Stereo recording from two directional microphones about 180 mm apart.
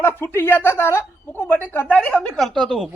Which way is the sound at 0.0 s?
10° left (ahead or behind).